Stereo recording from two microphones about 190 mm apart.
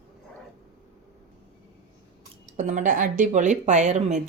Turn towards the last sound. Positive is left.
turn(degrees=-40)  # may be behind; listen again after turning